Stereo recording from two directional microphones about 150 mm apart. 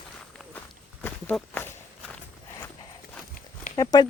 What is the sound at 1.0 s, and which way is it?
Walk, 15° left (ahead or behind).